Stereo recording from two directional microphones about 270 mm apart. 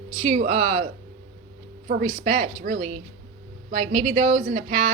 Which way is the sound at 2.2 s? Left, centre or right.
Right.